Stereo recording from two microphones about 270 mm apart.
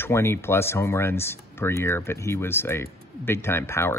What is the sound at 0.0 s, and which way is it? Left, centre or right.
Speech, centre.